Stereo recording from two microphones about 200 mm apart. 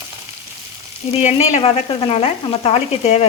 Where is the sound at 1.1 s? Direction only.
35° left (ahead or behind).